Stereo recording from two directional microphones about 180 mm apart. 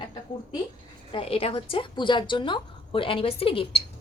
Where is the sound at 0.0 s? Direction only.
20° left (ahead or behind).